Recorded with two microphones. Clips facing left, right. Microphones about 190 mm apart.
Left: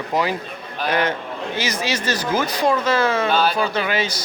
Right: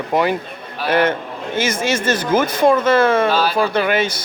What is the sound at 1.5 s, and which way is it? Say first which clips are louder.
Speech: right 6 dB; 50° right (ahead or behind).